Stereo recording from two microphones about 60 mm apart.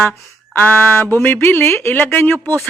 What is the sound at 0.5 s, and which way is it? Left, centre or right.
Speech, left.